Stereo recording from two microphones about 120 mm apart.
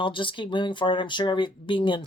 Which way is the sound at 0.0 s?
45° left (ahead or behind).